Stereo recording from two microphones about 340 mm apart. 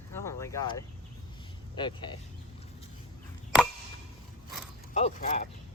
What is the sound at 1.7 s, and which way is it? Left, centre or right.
Speech, centre.